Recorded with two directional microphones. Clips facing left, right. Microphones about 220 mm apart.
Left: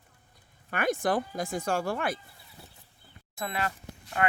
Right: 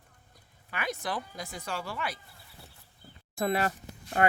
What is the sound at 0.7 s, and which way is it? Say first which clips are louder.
Speech: left 7 dB; 50° left (ahead or behind).